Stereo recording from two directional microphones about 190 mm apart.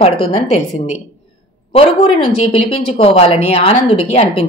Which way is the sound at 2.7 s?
30° left (ahead or behind).